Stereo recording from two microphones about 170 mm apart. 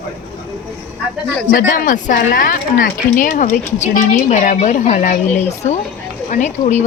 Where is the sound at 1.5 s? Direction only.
60° left (ahead or behind).